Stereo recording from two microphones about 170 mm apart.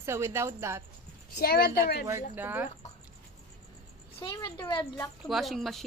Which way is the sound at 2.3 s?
10° right (ahead or behind).